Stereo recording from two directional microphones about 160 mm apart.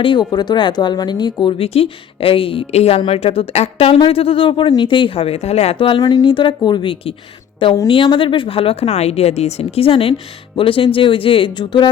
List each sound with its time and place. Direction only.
0.0 s speech: 30° left (ahead or behind)